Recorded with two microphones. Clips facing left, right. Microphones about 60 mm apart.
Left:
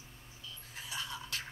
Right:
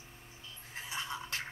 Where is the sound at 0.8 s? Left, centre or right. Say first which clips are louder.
Right 2 dB; right.